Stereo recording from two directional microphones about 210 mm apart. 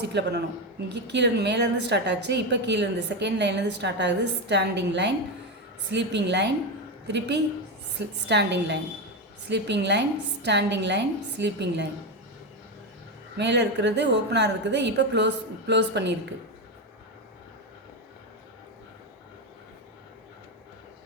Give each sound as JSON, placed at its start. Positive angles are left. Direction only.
{"t": 0.0, "sound": "a woman's voice", "side_deg": -55}
{"t": 13.3, "sound": "a woman's voice", "side_deg": -55}